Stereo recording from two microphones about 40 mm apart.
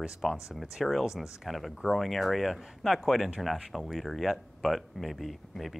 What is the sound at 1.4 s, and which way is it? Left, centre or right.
Speech, centre.